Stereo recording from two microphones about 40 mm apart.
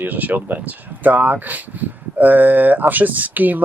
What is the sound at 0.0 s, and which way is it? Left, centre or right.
Speech, right.